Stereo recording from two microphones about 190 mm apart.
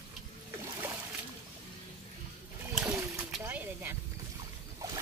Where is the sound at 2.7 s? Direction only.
10° right (ahead or behind).